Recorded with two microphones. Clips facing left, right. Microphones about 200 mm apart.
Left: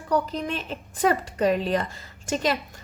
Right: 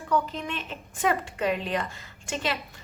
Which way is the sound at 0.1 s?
40° left (ahead or behind).